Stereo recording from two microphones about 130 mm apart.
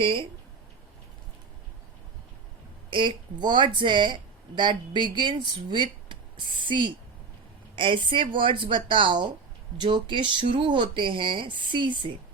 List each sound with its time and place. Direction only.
0.0 s speech: 45° right (ahead or behind)
2.9 s speech: 40° right (ahead or behind)